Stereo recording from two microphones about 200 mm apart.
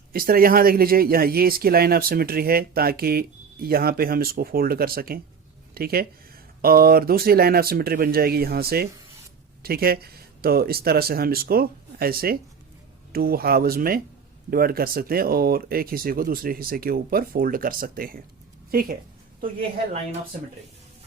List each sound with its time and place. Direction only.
0.1 s speech: 45° right (ahead or behind)